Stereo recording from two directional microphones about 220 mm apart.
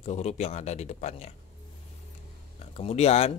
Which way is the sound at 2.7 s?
30° left (ahead or behind).